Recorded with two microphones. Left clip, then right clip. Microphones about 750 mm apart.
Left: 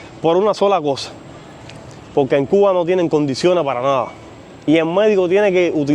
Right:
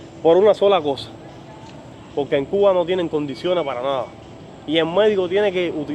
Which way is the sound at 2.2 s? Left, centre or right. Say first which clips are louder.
Left 4 dB; left.